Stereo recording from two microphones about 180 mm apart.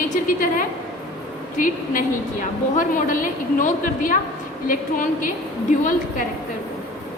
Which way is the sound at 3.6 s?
45° left (ahead or behind).